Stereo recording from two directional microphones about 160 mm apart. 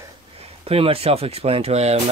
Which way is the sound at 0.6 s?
35° right (ahead or behind).